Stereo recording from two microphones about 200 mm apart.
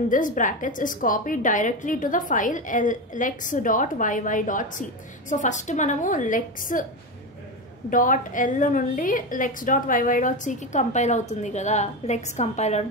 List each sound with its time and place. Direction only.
0.1 s a woman's voice: 40° left (ahead or behind)
7.9 s a woman's voice: 40° left (ahead or behind)